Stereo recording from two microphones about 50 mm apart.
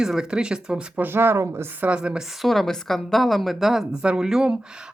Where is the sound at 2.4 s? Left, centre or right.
Centre.